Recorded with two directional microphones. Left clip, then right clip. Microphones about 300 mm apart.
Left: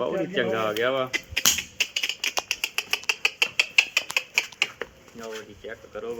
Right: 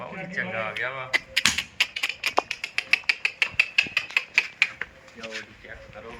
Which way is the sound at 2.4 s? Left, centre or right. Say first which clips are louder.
Left 2 dB; left.